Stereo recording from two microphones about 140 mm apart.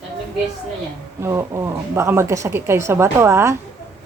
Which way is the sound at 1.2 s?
20° right (ahead or behind).